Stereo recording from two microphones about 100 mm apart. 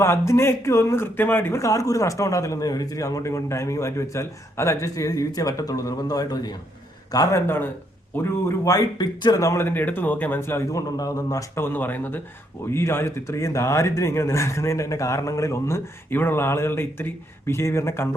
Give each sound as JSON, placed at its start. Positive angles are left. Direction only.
{"t": 0.0, "sound": "speech", "side_deg": 25}
{"t": 9.6, "sound": "speech", "side_deg": 20}